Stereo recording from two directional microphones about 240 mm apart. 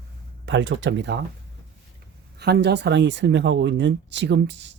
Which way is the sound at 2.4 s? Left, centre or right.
Right.